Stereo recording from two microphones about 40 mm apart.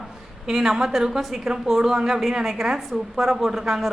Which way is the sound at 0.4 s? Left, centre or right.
Centre.